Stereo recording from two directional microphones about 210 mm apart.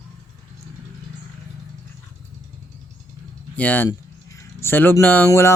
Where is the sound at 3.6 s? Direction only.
10° left (ahead or behind).